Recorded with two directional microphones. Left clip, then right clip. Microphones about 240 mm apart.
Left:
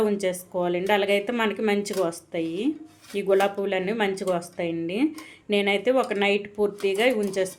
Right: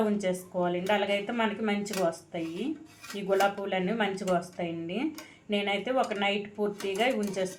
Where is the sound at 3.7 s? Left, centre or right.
Left.